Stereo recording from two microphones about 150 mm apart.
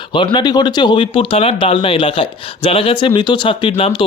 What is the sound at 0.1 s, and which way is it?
Speech, 35° left (ahead or behind).